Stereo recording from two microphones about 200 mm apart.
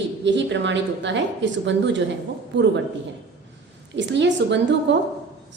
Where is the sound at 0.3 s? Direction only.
65° right (ahead or behind).